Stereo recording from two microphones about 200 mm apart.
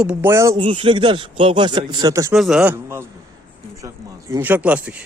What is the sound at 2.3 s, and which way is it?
Speech, centre (ahead or behind).